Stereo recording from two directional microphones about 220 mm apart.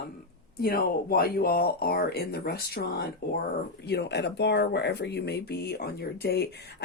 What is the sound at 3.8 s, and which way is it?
Speech, 50° left (ahead or behind).